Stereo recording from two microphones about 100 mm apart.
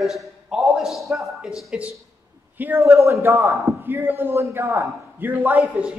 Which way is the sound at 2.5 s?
20° right (ahead or behind).